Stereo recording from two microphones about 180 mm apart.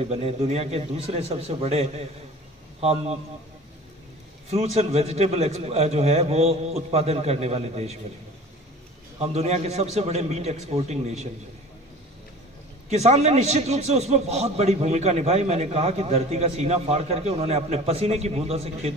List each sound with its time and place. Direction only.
0.0 s a man's voice: 35° right (ahead or behind)
4.5 s a man's voice: 35° right (ahead or behind)
9.2 s a man's voice: 35° right (ahead or behind)
12.9 s a man's voice: 40° right (ahead or behind)